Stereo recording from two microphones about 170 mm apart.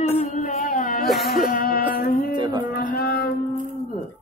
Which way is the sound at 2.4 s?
25° right (ahead or behind).